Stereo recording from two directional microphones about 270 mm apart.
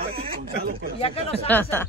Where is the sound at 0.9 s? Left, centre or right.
Left.